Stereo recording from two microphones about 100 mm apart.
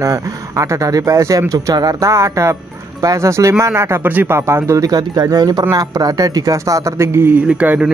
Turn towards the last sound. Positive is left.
turn(degrees=-15)  # may be behind; listen again after turning